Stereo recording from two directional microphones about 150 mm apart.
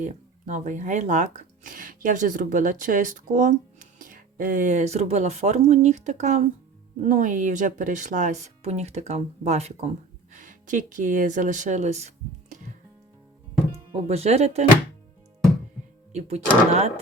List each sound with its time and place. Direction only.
0.0 s speech: 55° right (ahead or behind)
10.3 s speech: 60° right (ahead or behind)
13.9 s speech: 45° right (ahead or behind)
16.1 s speech: 45° right (ahead or behind)